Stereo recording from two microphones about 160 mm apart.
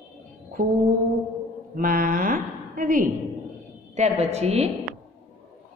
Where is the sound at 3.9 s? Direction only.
45° right (ahead or behind).